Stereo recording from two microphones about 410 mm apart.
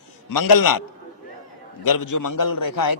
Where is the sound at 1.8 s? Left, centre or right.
Left.